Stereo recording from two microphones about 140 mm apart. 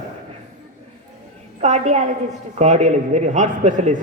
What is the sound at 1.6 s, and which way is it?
A man's voice, 55° right (ahead or behind).